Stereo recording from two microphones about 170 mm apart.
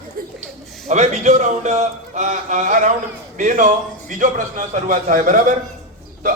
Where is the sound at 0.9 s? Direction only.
45° right (ahead or behind).